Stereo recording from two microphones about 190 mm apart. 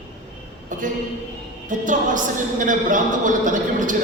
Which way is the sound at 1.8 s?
40° right (ahead or behind).